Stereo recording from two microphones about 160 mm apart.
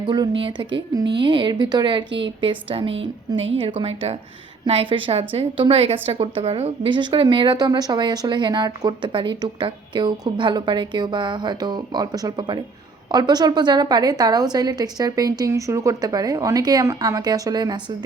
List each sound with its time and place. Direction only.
0.1 s a woman's voice: 30° right (ahead or behind)